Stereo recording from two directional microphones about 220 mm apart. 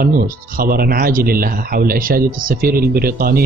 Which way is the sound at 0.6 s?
40° right (ahead or behind).